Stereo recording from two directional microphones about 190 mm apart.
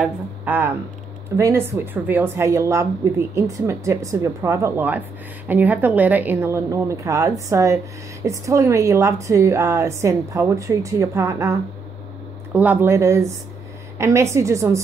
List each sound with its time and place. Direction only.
0.0 s a woman's voice: 10° right (ahead or behind)
12.5 s a woman's voice: 10° right (ahead or behind)